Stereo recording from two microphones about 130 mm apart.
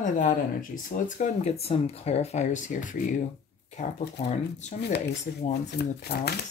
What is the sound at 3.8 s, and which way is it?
Speech, 60° left (ahead or behind).